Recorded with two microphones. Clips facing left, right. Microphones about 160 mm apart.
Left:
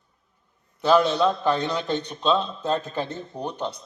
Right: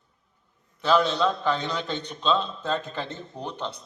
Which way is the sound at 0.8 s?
10° left (ahead or behind).